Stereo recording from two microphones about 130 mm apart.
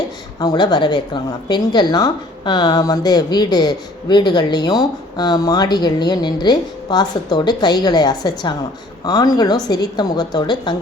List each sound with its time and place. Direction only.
0.3 s a woman's voice: 30° left (ahead or behind)